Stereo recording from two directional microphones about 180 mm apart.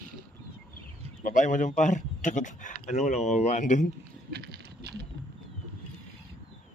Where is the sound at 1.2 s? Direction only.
45° left (ahead or behind).